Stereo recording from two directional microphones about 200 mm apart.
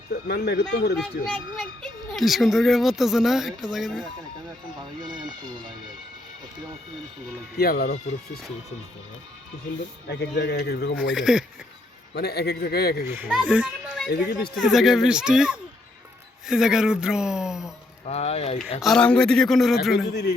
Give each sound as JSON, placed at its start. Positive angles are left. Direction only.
{"t": 0.1, "sound": "a man's voice", "side_deg": 55}
{"t": 0.9, "sound": "speech", "side_deg": 0}
{"t": 7.6, "sound": "a man's voice", "side_deg": 50}
{"t": 10.1, "sound": "speech", "side_deg": 60}
{"t": 11.1, "sound": "speech", "side_deg": 0}
{"t": 12.1, "sound": "a man's voice", "side_deg": 55}
{"t": 13.1, "sound": "a child's voice", "side_deg": -5}
{"t": 13.5, "sound": "children playing", "side_deg": -5}
{"t": 14.5, "sound": "speech", "side_deg": 0}
{"t": 18.0, "sound": "speech", "side_deg": 30}
{"t": 18.8, "sound": "speech", "side_deg": 0}